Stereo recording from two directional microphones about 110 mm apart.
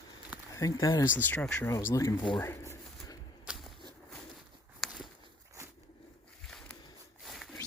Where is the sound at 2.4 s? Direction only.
25° left (ahead or behind).